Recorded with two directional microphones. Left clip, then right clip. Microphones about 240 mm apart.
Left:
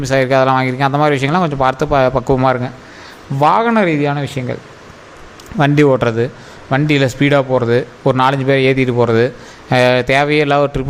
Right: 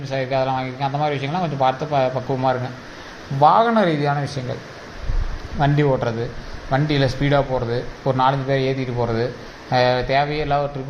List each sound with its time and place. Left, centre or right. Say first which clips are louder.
0.0 s a man's voice: left 9 dB; left
5.5 s a man's voice: left 7 dB; left